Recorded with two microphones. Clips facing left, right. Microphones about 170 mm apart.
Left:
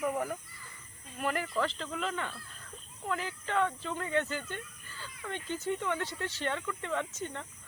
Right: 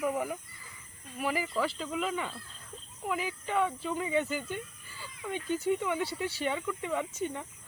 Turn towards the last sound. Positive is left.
turn(degrees=-10)  # may be behind; listen again after turning